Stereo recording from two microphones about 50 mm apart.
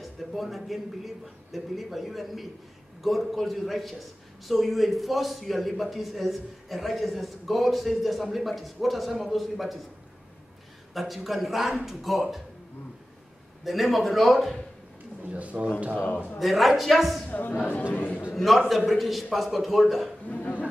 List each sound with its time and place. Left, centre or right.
0.0 s a man's voice: centre
10.9 s a man's voice: centre
13.7 s a man's voice: centre
15.2 s speech: right
16.3 s a man's voice: centre
17.3 s a woman's voice: left
18.3 s a sound: centre
18.9 s a man's voice: centre
20.2 s a sound: left